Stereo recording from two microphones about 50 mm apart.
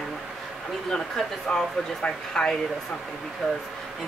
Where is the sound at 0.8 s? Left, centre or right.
Centre.